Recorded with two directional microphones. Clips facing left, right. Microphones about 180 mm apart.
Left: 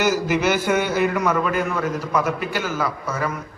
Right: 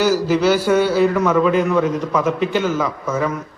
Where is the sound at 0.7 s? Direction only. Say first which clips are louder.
Right 5 dB; 5° left (ahead or behind).